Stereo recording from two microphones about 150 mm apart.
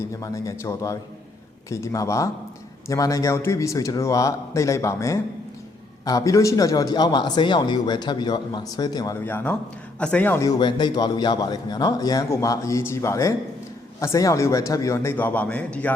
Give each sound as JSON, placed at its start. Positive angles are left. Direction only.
{"t": 0.0, "sound": "a man's voice", "side_deg": 20}
{"t": 9.1, "sound": "speech", "side_deg": 15}
{"t": 10.6, "sound": "a man's voice", "side_deg": 30}